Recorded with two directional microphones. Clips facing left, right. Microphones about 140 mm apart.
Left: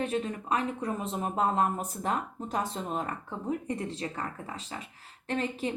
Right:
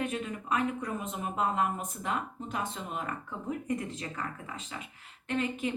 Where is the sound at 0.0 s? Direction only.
30° left (ahead or behind).